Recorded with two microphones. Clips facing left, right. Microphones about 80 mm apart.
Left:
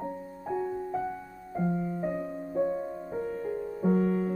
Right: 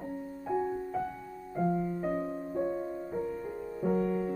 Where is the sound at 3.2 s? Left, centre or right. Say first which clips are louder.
Left 3 dB; left.